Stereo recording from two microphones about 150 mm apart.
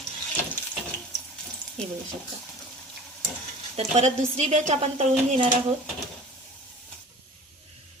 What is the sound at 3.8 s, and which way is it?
A woman's voice, 50° right (ahead or behind).